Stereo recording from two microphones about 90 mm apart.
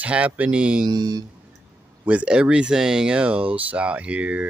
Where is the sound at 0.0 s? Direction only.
15° right (ahead or behind).